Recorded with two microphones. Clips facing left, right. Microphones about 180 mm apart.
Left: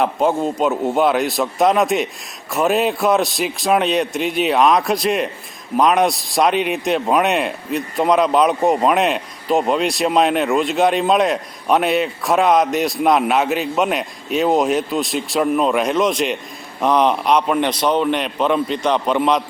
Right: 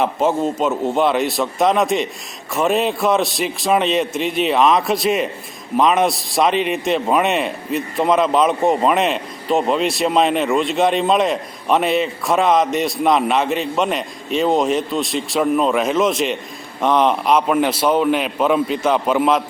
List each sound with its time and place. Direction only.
0.0 s a man's voice: centre (ahead or behind)